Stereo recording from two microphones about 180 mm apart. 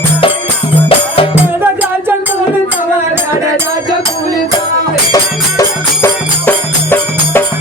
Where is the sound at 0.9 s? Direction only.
30° left (ahead or behind).